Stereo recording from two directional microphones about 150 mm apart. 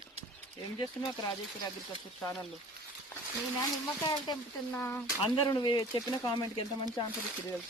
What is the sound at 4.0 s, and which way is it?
Speech, 30° left (ahead or behind).